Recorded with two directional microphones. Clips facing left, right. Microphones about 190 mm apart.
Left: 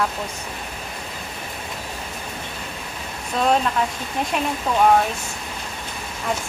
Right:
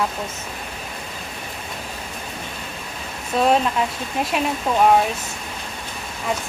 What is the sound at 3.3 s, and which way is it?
Speech, 5° right (ahead or behind).